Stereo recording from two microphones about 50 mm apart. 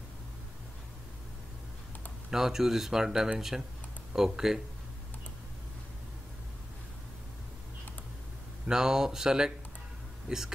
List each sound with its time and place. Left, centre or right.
2.3 s speech: centre
8.6 s speech: centre